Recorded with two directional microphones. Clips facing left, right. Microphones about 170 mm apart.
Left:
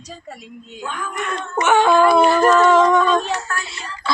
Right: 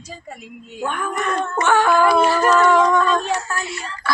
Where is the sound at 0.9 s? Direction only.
60° right (ahead or behind).